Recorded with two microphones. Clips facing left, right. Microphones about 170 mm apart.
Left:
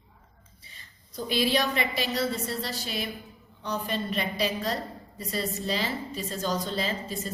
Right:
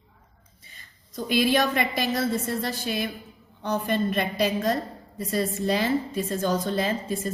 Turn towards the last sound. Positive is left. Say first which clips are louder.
# right 5 dB
turn(degrees=-55)  # may be behind; listen again after turning